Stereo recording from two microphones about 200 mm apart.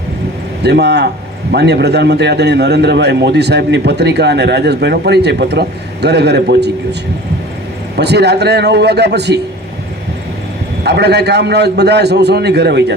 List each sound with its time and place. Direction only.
0.6 s a man's voice: 55° right (ahead or behind)
7.9 s a man's voice: 55° right (ahead or behind)
10.8 s a man's voice: 55° right (ahead or behind)